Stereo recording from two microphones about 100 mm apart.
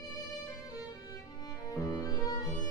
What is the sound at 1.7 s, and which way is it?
Music, 35° left (ahead or behind).